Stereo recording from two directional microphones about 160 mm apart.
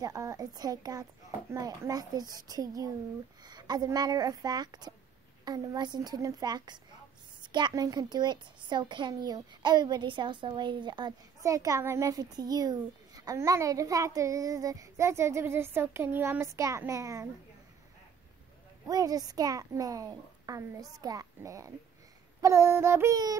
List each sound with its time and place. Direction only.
0.0 s a child's voice: 20° right (ahead or behind)
18.9 s a child's voice: 20° right (ahead or behind)
22.4 s child singing: 20° right (ahead or behind)